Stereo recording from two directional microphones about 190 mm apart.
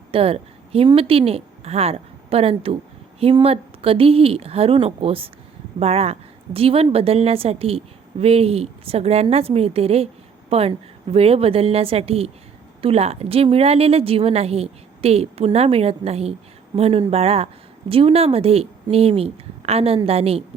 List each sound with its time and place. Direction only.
0.1 s a woman's voice: 30° right (ahead or behind)